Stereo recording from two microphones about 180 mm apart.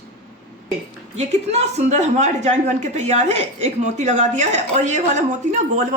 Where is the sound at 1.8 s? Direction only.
40° right (ahead or behind).